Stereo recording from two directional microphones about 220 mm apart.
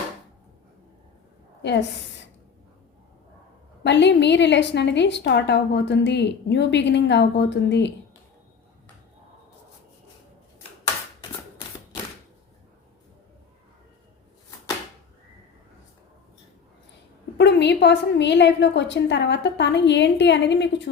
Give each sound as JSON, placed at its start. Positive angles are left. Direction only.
{"t": 3.8, "sound": "a woman's voice", "side_deg": 50}
{"t": 11.2, "sound": "shuffling cards", "side_deg": 20}
{"t": 17.3, "sound": "a woman's voice", "side_deg": 50}